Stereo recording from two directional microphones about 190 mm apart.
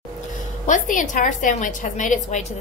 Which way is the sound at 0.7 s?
45° left (ahead or behind).